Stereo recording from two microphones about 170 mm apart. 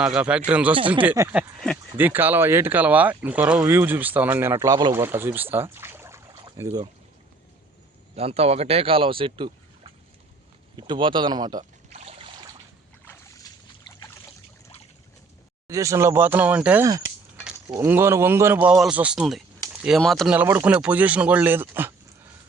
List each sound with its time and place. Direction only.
0.0 s speech: 5° right (ahead or behind)
0.8 s speech: 30° right (ahead or behind)
1.0 s speech: 15° right (ahead or behind)
4.9 s speech: 15° right (ahead or behind)
8.1 s speech: 35° right (ahead or behind)
10.8 s speech: 25° right (ahead or behind)
11.9 s trickle: 40° right (ahead or behind)
13.1 s boat: 20° left (ahead or behind)
15.6 s speech: 20° right (ahead or behind); by 20.3 s centre (ahead or behind)
20.3 s speech: 10° right (ahead or behind)